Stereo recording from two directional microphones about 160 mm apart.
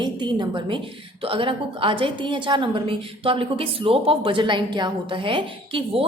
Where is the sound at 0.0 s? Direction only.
30° right (ahead or behind).